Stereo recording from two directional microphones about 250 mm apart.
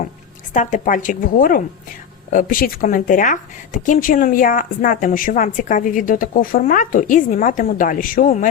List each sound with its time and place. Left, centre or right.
0.5 s a woman's voice: left